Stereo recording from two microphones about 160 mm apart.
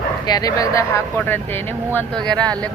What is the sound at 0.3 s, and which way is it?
Speech, 25° left (ahead or behind).